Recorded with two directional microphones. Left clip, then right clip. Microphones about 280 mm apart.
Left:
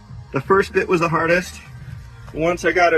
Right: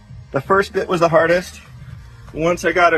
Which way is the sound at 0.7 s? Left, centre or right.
Right.